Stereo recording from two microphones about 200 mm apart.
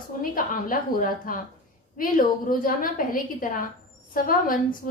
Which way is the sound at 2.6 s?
45° left (ahead or behind).